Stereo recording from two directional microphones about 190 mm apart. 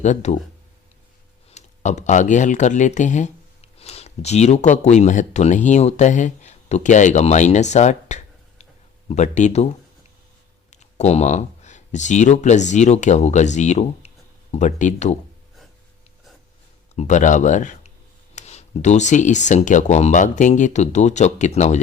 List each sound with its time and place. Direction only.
0.0 s speech: 40° left (ahead or behind)
1.5 s speech: 35° left (ahead or behind)
16.9 s speech: 35° left (ahead or behind)